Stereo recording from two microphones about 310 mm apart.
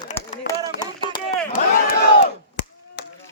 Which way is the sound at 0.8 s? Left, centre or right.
Centre.